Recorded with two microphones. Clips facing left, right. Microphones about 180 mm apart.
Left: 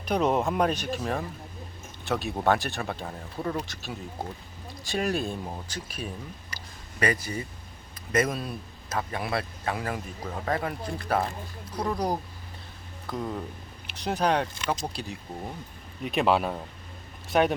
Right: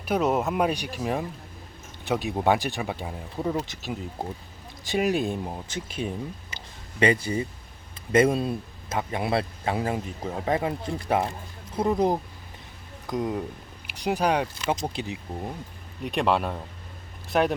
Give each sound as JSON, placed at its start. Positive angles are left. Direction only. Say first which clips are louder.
{"t": 0.0, "sound": "speech", "louder": "right 1 dB", "side_deg": -5}
{"t": 16.0, "sound": "speech", "louder": "even", "side_deg": 0}